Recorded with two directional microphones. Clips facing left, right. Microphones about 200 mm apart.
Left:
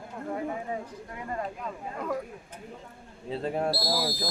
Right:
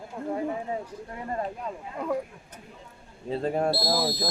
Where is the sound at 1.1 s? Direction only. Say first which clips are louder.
Right 2 dB; 35° right (ahead or behind).